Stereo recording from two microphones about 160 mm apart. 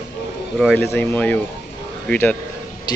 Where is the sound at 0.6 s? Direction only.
Centre (ahead or behind).